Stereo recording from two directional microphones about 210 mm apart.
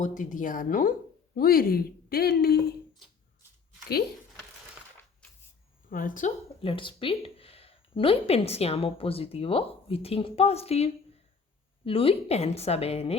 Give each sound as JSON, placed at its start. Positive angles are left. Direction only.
{"t": 0.0, "sound": "speech", "side_deg": 40}
{"t": 5.9, "sound": "speech", "side_deg": 40}
{"t": 6.6, "sound": "speech", "side_deg": 25}